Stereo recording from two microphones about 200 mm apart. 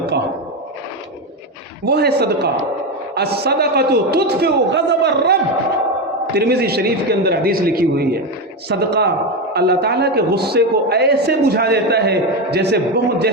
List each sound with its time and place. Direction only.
1.8 s a man's voice: 55° right (ahead or behind)